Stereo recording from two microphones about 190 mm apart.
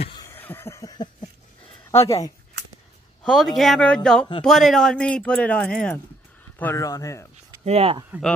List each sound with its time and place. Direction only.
0.0 s a sound: 20° left (ahead or behind)
1.9 s speech: 15° left (ahead or behind)
3.3 s speech: centre (ahead or behind); by 7.2 s 15° left (ahead or behind)
7.6 s speech: 30° right (ahead or behind)